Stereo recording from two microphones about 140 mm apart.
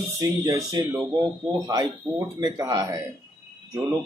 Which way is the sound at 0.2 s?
25° right (ahead or behind).